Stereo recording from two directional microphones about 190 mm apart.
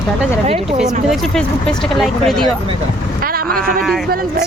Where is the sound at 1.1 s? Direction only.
5° left (ahead or behind).